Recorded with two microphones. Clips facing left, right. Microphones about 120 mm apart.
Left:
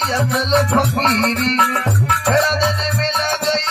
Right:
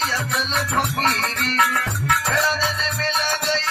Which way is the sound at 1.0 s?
30° left (ahead or behind).